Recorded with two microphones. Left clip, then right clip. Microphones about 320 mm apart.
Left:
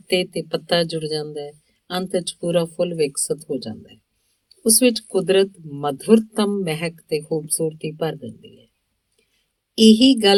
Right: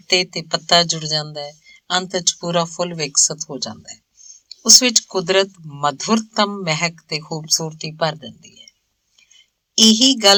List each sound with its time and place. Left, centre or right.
0.1 s speech: centre
9.7 s speech: centre